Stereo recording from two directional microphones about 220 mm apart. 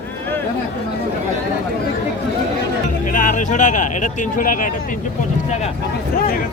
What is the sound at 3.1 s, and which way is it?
Speech, 35° left (ahead or behind).